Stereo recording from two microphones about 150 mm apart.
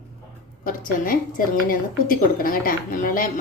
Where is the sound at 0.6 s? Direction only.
65° left (ahead or behind).